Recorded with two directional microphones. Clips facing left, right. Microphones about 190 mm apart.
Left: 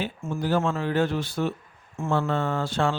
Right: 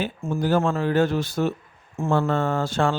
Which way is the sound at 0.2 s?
40° right (ahead or behind).